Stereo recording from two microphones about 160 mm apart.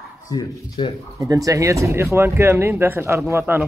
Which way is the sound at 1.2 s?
20° right (ahead or behind).